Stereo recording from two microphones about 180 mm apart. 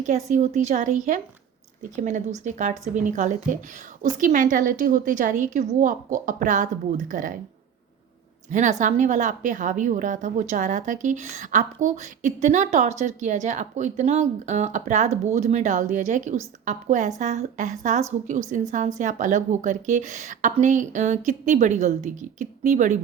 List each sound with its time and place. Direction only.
0.0 s a woman's voice: 40° right (ahead or behind)
8.4 s a woman's voice: 45° right (ahead or behind)